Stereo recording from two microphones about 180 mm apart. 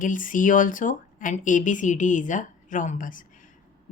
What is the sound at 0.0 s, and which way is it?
Speech, 45° left (ahead or behind).